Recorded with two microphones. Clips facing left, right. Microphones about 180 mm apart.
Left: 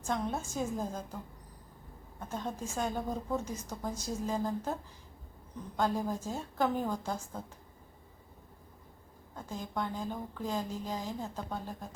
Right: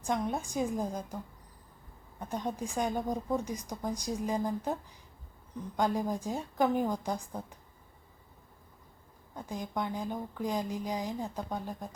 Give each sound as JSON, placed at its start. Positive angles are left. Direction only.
{"t": 0.0, "sound": "a woman's voice", "side_deg": -15}
{"t": 2.1, "sound": "a woman's voice", "side_deg": -15}
{"t": 9.3, "sound": "a woman's voice", "side_deg": -15}